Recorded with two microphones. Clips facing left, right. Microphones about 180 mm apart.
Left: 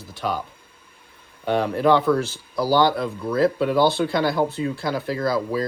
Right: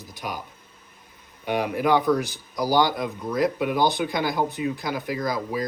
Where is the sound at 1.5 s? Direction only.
15° right (ahead or behind).